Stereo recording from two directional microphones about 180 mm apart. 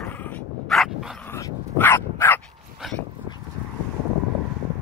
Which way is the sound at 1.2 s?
15° left (ahead or behind).